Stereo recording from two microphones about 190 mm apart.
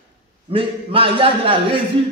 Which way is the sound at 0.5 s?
30° right (ahead or behind).